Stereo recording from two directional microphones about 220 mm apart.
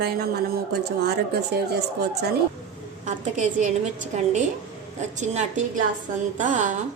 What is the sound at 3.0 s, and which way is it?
A woman's voice, 35° right (ahead or behind).